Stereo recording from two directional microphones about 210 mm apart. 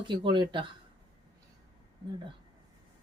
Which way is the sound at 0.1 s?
20° right (ahead or behind).